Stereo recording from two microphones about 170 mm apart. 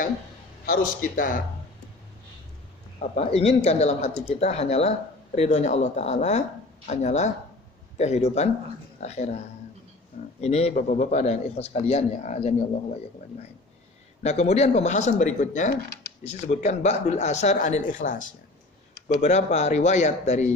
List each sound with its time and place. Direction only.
0.6 s a man's voice: 55° left (ahead or behind)
3.0 s speech: 35° left (ahead or behind)
10.4 s speech: 40° left (ahead or behind)
14.2 s speech: 40° left (ahead or behind)